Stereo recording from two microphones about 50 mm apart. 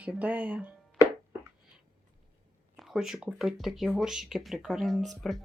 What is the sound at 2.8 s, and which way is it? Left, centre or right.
Speech, centre.